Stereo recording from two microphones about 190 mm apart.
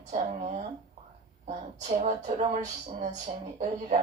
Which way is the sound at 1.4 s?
40° right (ahead or behind).